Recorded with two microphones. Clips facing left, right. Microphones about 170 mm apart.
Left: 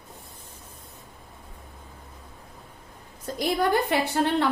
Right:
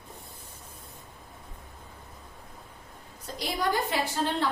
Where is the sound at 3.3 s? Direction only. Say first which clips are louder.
Left 5 dB; 60° left (ahead or behind).